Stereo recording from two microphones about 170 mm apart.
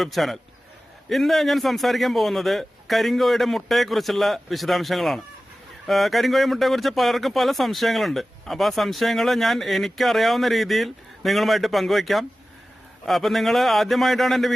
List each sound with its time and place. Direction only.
0.0 s a man's voice: centre (ahead or behind)